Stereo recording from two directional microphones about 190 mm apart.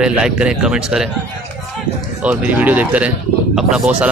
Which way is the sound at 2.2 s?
10° right (ahead or behind).